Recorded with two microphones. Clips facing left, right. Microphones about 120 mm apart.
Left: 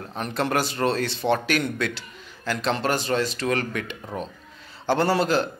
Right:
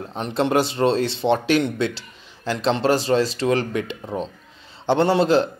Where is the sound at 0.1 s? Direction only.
25° right (ahead or behind).